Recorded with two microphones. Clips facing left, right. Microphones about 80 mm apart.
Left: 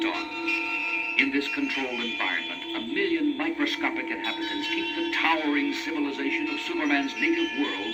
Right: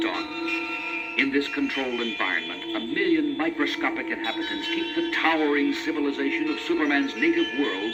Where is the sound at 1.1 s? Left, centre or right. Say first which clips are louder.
Right 3 dB; right.